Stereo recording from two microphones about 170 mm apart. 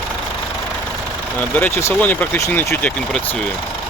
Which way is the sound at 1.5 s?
15° left (ahead or behind).